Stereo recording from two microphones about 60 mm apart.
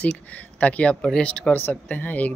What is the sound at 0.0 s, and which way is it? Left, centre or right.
Speech, left.